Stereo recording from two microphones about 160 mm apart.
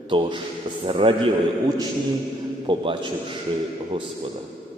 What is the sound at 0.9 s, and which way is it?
Speech, 30° right (ahead or behind).